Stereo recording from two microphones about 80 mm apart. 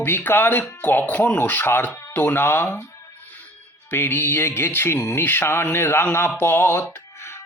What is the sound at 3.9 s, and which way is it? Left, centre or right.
Music, left.